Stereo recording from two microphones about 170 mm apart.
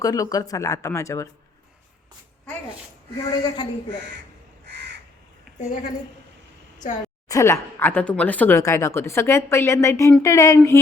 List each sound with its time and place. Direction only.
0.0 s speech: 20° left (ahead or behind)
3.4 s speech: 25° left (ahead or behind)
5.5 s a woman's voice: 45° left (ahead or behind)
7.3 s speech: 15° left (ahead or behind)